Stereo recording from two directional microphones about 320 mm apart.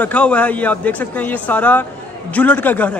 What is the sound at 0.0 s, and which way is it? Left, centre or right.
A man's voice, centre.